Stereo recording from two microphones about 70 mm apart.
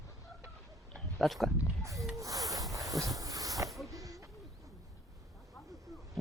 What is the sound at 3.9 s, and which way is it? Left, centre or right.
Owl, right.